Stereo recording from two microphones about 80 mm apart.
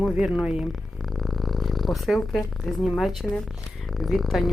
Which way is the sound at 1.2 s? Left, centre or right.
Centre.